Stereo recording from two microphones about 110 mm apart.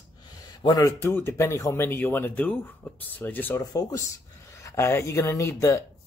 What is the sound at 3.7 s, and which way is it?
Speech, 30° left (ahead or behind).